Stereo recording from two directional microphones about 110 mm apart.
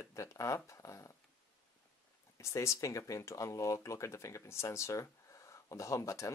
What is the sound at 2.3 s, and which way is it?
Speech, 25° left (ahead or behind).